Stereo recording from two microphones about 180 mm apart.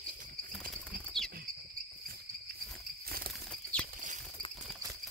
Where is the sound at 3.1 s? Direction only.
55° right (ahead or behind).